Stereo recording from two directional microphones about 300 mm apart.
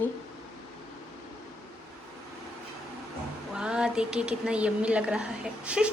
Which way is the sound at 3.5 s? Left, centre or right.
Centre.